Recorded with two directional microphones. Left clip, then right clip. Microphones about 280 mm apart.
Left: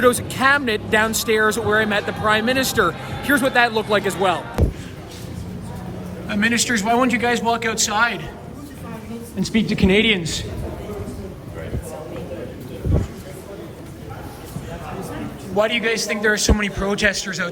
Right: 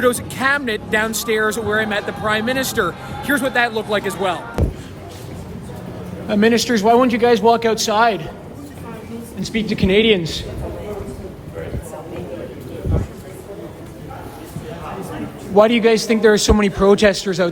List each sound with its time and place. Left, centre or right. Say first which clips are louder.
0.0 s speech: left 1 dB; centre
6.2 s a man's voice: right 4 dB; centre
9.4 s speech: left 1 dB; centre
15.5 s a man's voice: right 6 dB; right